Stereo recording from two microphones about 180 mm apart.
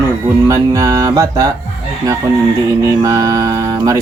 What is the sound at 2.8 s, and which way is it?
Speech, 20° right (ahead or behind).